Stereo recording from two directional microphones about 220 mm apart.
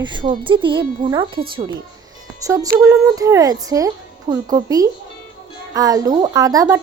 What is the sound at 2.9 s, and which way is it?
Speech, 15° right (ahead or behind).